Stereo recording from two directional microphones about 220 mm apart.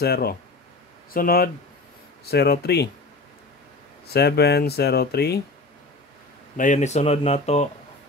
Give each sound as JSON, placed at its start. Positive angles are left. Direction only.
{"t": 0.0, "sound": "speech", "side_deg": 45}
{"t": 4.1, "sound": "speech", "side_deg": 45}
{"t": 6.5, "sound": "speech", "side_deg": 35}